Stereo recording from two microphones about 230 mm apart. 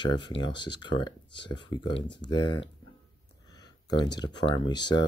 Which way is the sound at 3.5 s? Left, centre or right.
Centre.